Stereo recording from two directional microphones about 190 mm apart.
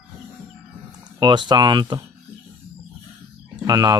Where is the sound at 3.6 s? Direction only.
20° right (ahead or behind).